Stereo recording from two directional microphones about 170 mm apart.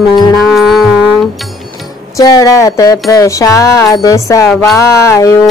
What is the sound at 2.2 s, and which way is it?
Music, 20° left (ahead or behind).